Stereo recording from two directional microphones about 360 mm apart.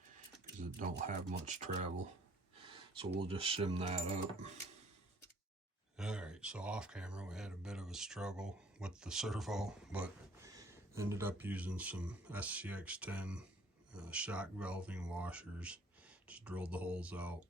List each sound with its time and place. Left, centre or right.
0.6 s speech: right
6.0 s speech: centre